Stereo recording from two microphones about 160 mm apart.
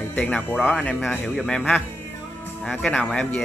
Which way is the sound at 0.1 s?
10° left (ahead or behind).